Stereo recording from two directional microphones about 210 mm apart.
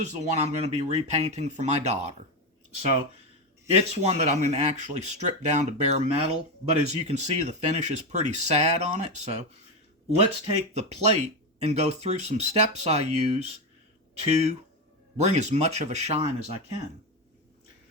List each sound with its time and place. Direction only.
0.2 s speech: 35° right (ahead or behind)
3.7 s speech: 30° right (ahead or behind)